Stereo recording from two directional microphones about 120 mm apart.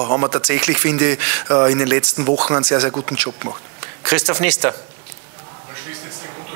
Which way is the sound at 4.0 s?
20° right (ahead or behind).